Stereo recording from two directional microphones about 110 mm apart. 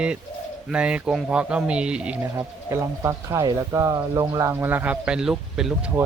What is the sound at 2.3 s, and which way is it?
Speech, 25° right (ahead or behind).